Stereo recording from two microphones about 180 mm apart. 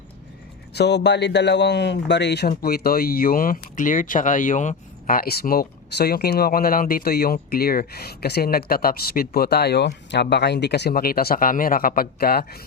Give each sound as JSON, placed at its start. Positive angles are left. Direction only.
{"t": 0.7, "sound": "speech", "side_deg": 70}
{"t": 2.5, "sound": "speech", "side_deg": 55}